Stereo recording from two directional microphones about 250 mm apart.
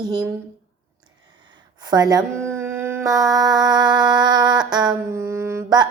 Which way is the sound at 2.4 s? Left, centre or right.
Centre.